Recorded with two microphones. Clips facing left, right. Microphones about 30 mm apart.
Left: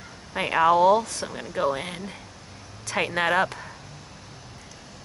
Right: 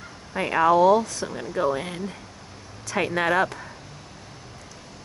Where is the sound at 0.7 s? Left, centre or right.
Left.